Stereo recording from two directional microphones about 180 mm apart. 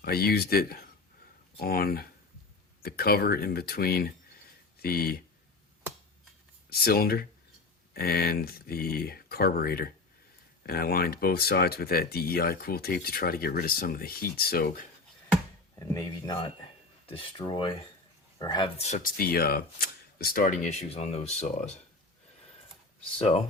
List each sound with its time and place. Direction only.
0.0 s speech: 60° left (ahead or behind)
6.7 s speech: 60° left (ahead or behind)
15.7 s speech: 15° left (ahead or behind)
18.8 s speech: 40° left (ahead or behind)
23.1 s speech: 35° left (ahead or behind)